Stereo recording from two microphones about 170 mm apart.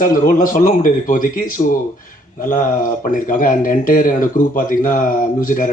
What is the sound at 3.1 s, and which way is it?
Speech, 55° left (ahead or behind).